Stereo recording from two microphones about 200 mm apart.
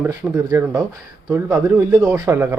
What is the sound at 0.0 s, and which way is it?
A man's voice, 15° right (ahead or behind).